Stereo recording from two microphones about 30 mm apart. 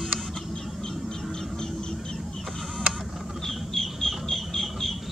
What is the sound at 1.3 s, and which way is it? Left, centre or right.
Vehicle, centre.